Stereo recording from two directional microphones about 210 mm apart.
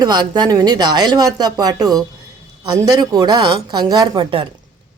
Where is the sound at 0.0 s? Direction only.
20° right (ahead or behind).